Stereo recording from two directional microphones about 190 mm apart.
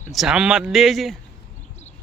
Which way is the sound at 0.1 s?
Centre (ahead or behind).